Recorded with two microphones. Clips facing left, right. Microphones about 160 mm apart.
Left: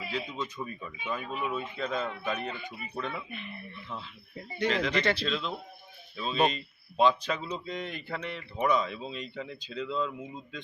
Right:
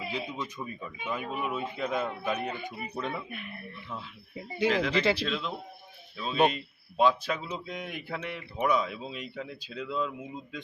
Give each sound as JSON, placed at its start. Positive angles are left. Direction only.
{"t": 0.1, "sound": "speech", "side_deg": -15}
{"t": 3.2, "sound": "speech", "side_deg": 0}